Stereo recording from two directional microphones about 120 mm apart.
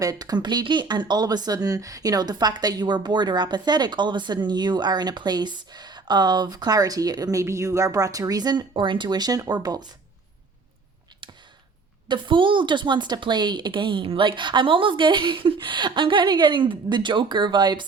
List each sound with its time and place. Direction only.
0.0 s speech: 30° right (ahead or behind)
12.0 s speech: 40° right (ahead or behind)